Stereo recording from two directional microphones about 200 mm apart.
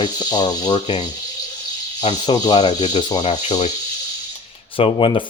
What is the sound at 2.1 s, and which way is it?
Speech, 20° left (ahead or behind).